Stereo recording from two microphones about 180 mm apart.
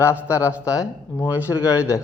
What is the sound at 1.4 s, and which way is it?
Speech, 15° left (ahead or behind).